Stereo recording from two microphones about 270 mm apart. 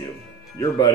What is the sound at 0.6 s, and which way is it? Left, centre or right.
Speech, centre.